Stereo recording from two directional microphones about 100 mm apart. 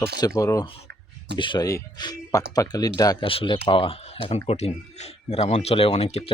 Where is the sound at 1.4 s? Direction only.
55° left (ahead or behind).